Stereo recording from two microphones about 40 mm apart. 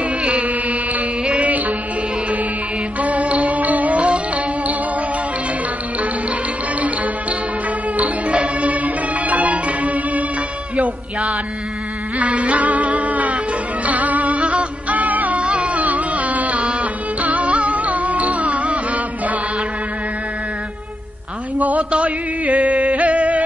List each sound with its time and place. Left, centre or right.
0.2 s music: right
1.2 s music: right
3.0 s music: right
8.0 s music: right
12.2 s music: right
15.4 s music: right
21.5 s music: right